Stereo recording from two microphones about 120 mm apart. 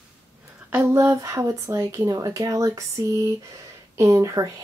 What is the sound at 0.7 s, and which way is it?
Speech, 15° right (ahead or behind).